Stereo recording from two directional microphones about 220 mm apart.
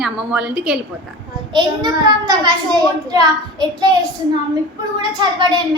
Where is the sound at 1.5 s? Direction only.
20° right (ahead or behind).